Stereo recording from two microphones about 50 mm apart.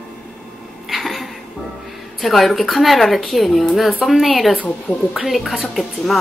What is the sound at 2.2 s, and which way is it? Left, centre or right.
Speech, centre.